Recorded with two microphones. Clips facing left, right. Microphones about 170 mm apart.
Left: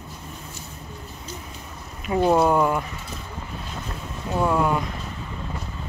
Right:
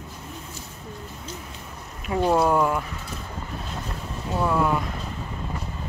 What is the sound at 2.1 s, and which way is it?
Speech, 5° left (ahead or behind).